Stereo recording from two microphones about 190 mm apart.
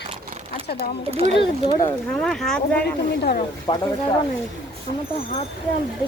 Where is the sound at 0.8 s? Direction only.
35° right (ahead or behind).